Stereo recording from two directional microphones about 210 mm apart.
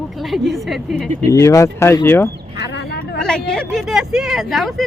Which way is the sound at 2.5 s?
55° left (ahead or behind).